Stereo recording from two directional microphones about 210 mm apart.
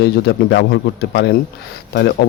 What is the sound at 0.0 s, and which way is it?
A man's voice, 55° left (ahead or behind).